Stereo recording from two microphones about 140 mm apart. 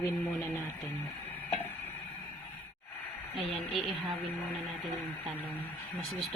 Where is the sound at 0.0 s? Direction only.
15° left (ahead or behind).